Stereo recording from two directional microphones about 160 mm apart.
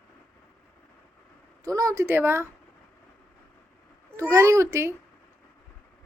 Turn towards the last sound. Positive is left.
turn(degrees=-15)  # may be behind; listen again after turning